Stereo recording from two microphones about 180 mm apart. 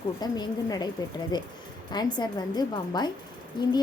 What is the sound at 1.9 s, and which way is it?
A woman's voice, 25° left (ahead or behind).